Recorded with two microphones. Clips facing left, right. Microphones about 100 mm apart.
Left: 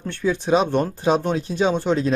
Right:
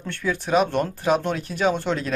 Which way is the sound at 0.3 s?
20° left (ahead or behind).